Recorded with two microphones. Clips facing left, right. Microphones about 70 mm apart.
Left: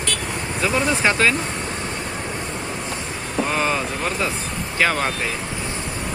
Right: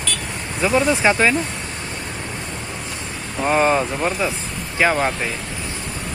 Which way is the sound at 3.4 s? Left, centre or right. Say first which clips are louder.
Right 6 dB; right.